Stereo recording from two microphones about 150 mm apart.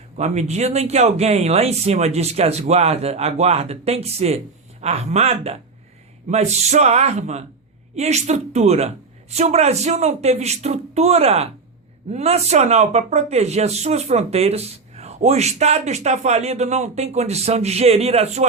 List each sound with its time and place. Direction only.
0.2 s speech: 50° right (ahead or behind)